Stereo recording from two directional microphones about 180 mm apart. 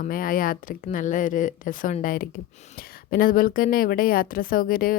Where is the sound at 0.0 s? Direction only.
50° left (ahead or behind).